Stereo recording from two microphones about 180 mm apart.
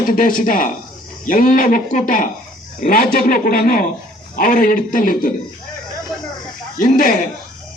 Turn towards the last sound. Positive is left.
turn(degrees=50)  # may be behind; listen again after turning